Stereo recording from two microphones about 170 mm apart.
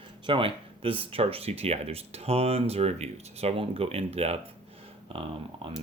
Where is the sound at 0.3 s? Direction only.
30° right (ahead or behind).